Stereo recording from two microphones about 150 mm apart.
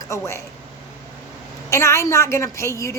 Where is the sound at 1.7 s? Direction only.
20° left (ahead or behind).